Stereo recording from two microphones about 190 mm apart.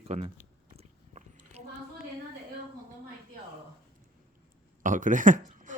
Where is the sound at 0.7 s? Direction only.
35° right (ahead or behind).